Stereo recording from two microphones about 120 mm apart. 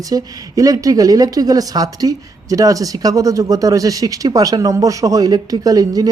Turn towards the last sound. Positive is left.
turn(degrees=-30)  # may be behind; listen again after turning